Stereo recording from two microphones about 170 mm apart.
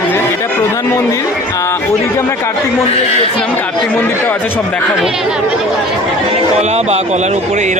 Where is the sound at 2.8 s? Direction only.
40° left (ahead or behind).